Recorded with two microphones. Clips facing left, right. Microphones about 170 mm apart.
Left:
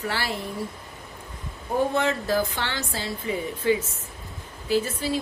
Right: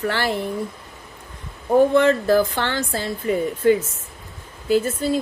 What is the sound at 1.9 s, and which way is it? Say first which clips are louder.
Speech: right 8 dB; 55° right (ahead or behind).